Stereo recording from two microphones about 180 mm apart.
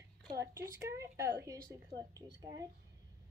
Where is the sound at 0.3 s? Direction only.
15° right (ahead or behind).